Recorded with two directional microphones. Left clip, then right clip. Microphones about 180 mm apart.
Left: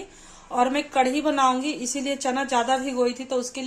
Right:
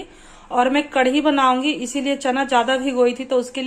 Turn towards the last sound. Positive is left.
turn(degrees=5)  # may be behind; listen again after turning